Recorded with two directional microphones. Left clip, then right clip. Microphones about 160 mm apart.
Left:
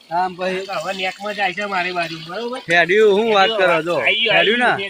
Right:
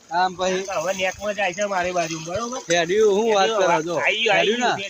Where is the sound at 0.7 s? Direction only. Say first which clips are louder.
Even; 50° right (ahead or behind).